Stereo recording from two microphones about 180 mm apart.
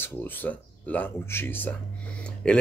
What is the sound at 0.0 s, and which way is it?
Speech, 10° left (ahead or behind).